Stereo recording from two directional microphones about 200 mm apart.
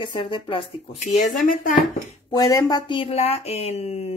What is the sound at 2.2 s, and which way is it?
Speech, 20° left (ahead or behind).